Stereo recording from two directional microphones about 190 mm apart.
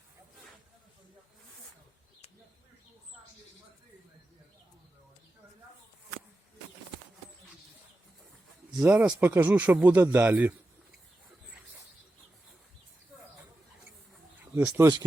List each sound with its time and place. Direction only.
8.7 s speech: 10° right (ahead or behind)
14.4 s a sound: 5° right (ahead or behind)
14.8 s speech: 20° right (ahead or behind)